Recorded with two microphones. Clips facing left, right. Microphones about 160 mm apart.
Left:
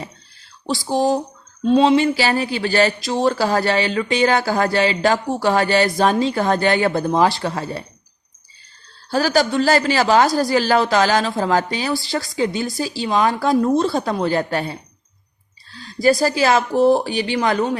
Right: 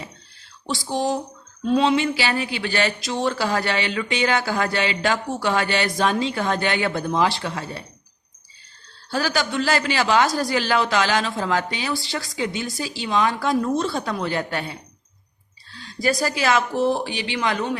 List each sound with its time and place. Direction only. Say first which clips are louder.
0.7 s speech: left 5 dB; 35° left (ahead or behind)
9.0 s speech: left 6 dB; 40° left (ahead or behind)